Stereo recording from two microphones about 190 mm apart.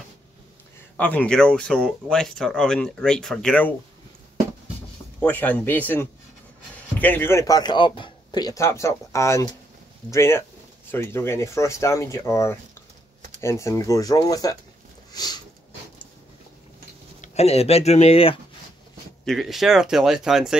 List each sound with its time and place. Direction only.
0.9 s speech: 10° left (ahead or behind)
5.2 s speech: 10° left (ahead or behind)
15.1 s a sound: 20° left (ahead or behind)
17.2 s speech: 35° left (ahead or behind)
19.2 s speech: centre (ahead or behind)